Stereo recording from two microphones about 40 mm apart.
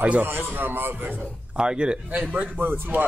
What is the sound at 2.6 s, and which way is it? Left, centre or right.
Speech, right.